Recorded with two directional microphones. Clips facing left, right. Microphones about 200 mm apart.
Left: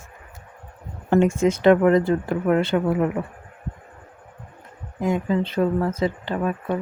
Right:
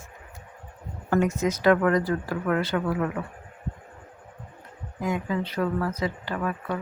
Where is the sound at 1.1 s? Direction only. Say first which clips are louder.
Left 5 dB; 25° left (ahead or behind).